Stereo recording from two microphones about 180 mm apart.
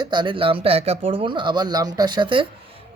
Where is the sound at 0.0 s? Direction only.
25° right (ahead or behind).